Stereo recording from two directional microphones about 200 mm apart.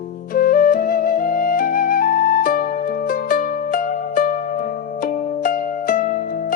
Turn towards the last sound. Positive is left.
turn(degrees=45)  # may be behind; listen again after turning